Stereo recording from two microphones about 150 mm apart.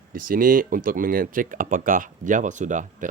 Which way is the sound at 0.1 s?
70° right (ahead or behind).